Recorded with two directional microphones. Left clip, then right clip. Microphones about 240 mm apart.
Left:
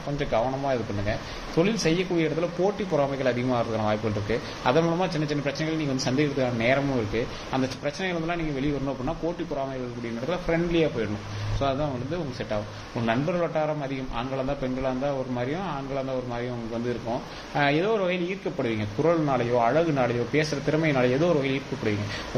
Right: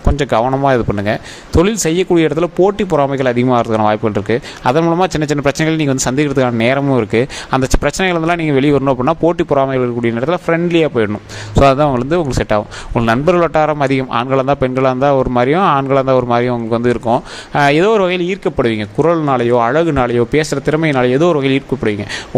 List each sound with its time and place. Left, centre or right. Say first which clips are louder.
0.2 s speech: right 12 dB; right